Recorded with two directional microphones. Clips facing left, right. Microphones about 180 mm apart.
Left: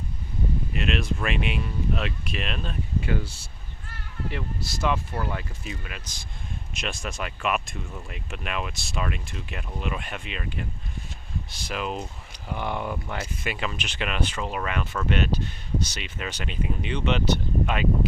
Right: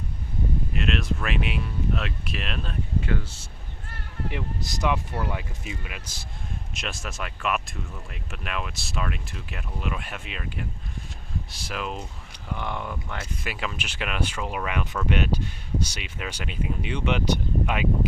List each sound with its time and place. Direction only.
0.7 s speech: centre (ahead or behind)
3.1 s speech: 10° left (ahead or behind)
4.3 s speech: 15° right (ahead or behind); by 13.2 s 10° left (ahead or behind)
13.4 s speech: centre (ahead or behind)